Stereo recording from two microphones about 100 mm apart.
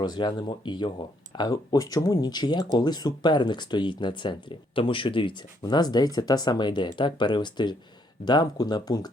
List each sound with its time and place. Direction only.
0.0 s speech: 45° left (ahead or behind)
1.4 s speech: 40° left (ahead or behind)